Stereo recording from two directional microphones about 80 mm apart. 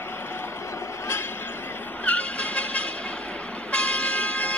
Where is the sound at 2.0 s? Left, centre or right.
Centre.